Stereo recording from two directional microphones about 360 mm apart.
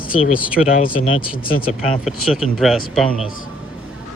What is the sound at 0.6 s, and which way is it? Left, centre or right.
Speech, left.